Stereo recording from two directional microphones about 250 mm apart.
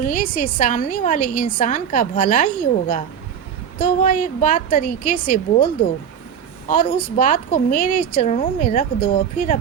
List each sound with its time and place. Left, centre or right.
0.0 s speech: left
6.7 s speech: left